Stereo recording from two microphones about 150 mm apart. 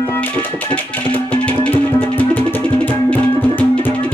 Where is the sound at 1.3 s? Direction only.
10° left (ahead or behind).